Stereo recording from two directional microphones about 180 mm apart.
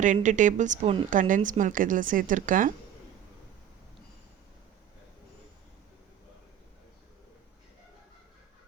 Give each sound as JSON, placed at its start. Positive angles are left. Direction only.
{"t": 0.0, "sound": "speech", "side_deg": -45}
{"t": 1.1, "sound": "speech", "side_deg": -45}